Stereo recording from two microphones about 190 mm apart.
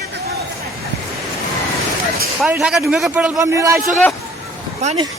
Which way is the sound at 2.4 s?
Centre (ahead or behind).